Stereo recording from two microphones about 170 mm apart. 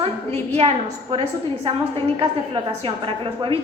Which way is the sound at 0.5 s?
40° right (ahead or behind).